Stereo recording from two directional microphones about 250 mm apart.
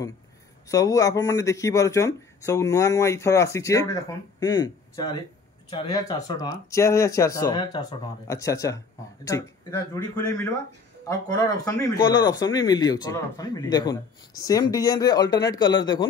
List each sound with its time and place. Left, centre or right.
0.7 s a man's voice: centre